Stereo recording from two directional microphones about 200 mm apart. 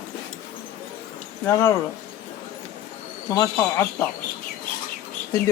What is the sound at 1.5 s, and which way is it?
Speech, 15° left (ahead or behind).